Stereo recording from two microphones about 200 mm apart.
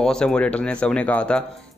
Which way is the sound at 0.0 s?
5° left (ahead or behind).